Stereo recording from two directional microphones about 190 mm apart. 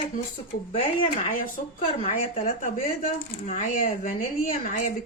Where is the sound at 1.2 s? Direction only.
45° left (ahead or behind).